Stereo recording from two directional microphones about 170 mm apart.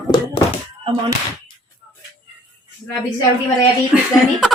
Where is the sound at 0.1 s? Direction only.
25° left (ahead or behind).